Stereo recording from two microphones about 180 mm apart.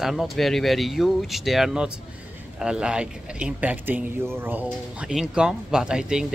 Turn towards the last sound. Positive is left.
turn(degrees=-5)  # may be behind; listen again after turning